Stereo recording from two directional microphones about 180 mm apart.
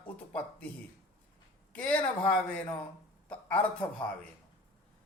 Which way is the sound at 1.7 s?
5° left (ahead or behind).